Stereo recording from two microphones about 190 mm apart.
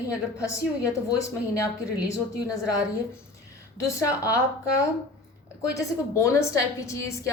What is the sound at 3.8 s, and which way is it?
Speech, 15° left (ahead or behind).